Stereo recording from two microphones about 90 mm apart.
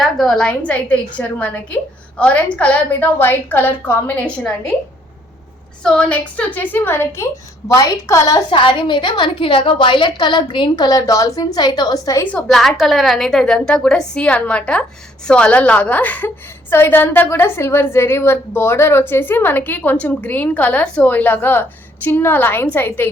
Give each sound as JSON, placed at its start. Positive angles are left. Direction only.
{"t": 0.0, "sound": "a woman's voice", "side_deg": 5}
{"t": 5.8, "sound": "a woman's voice", "side_deg": 10}
{"t": 7.7, "sound": "a woman's voice", "side_deg": 35}
{"t": 8.4, "sound": "a woman's voice", "side_deg": 70}
{"t": 12.5, "sound": "a woman's voice", "side_deg": 5}